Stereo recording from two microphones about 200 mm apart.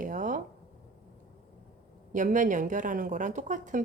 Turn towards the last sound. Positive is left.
turn(degrees=-40)  # may be behind; listen again after turning